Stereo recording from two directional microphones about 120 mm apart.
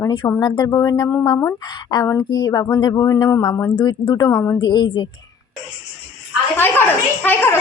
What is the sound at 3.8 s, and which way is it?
Speech, 40° left (ahead or behind).